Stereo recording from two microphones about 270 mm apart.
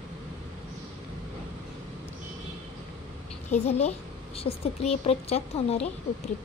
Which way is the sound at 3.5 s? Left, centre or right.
Left.